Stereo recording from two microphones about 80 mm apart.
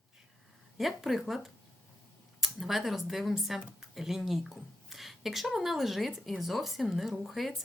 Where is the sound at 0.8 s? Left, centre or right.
Centre.